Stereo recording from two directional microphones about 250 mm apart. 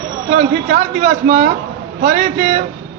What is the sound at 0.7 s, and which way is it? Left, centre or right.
A man's voice, right.